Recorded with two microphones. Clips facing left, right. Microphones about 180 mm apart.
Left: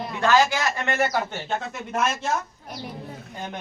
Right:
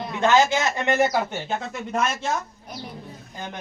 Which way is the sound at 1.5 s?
Centre (ahead or behind).